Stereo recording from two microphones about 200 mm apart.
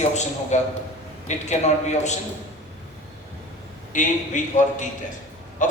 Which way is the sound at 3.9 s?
40° left (ahead or behind).